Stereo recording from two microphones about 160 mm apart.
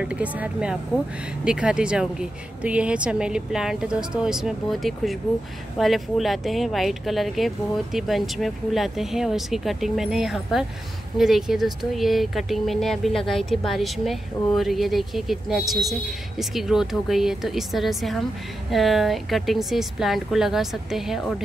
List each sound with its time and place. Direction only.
0.0 s speech: 10° right (ahead or behind)